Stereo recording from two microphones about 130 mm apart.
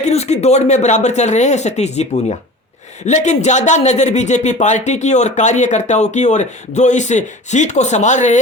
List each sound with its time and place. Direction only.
0.0 s speech: 55° left (ahead or behind)
3.1 s speech: 65° left (ahead or behind)